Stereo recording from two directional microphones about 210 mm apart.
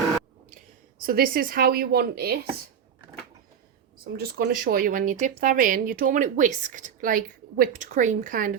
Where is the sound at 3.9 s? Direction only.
45° right (ahead or behind).